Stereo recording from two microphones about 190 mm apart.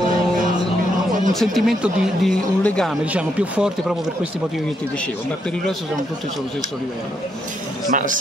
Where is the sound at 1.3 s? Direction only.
Centre (ahead or behind).